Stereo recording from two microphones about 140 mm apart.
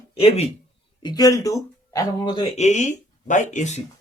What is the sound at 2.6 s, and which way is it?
Speech, 55° left (ahead or behind).